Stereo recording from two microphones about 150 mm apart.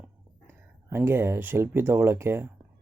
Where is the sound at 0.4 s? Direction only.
15° right (ahead or behind).